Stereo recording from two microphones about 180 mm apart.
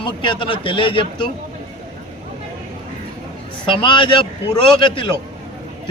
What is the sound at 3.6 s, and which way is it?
A man's voice, 30° left (ahead or behind).